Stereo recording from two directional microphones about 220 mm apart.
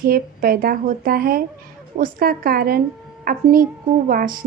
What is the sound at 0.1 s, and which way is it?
A woman's voice, 40° right (ahead or behind).